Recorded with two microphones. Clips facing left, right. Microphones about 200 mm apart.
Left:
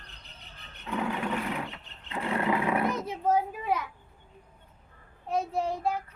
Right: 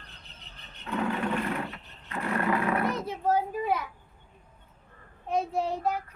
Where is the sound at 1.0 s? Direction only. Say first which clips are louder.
Right 3 dB; 15° left (ahead or behind).